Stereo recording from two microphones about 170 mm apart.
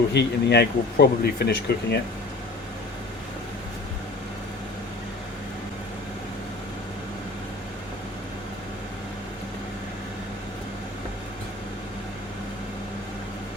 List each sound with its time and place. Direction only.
0.1 s speech: 80° left